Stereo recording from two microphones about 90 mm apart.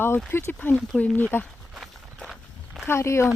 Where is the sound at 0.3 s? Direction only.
25° left (ahead or behind).